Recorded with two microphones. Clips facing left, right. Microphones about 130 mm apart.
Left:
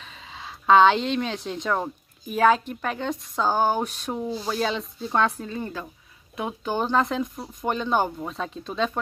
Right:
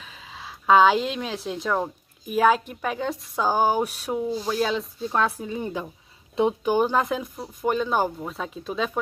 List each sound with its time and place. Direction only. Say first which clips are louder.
0.0 s speech: even; 5° right (ahead or behind)